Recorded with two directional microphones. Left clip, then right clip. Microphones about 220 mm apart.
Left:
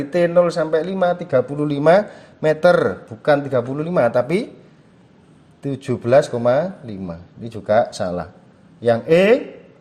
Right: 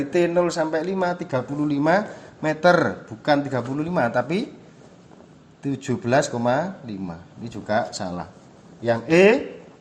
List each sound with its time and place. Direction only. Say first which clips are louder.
0.1 s speech: left 6 dB; 35° left (ahead or behind)
5.6 s speech: left 4 dB; 35° left (ahead or behind)